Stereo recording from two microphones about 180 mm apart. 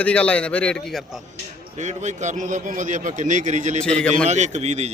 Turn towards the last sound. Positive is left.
turn(degrees=-40)  # may be behind; listen again after turning